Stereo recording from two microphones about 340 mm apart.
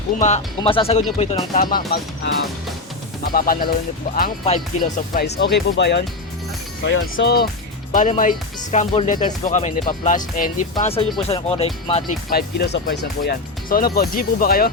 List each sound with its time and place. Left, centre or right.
0.2 s speech: centre
3.2 s speech: left